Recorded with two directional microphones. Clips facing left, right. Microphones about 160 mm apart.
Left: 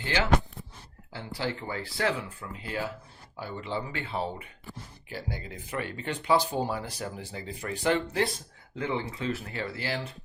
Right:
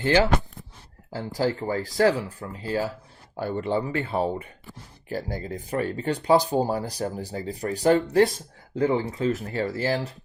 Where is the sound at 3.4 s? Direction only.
50° right (ahead or behind).